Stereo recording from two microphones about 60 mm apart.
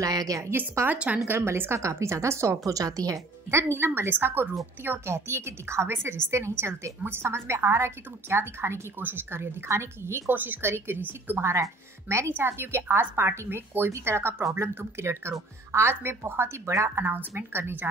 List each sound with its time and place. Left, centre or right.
0.0 s a woman's voice: right
0.8 s speech: right
1.2 s a woman's voice: right
2.6 s a woman's voice: right
3.4 s a woman's voice: right
10.3 s a woman's voice: right
11.4 s a woman's voice: right
12.3 s a woman's voice: right
17.0 s a woman's voice: right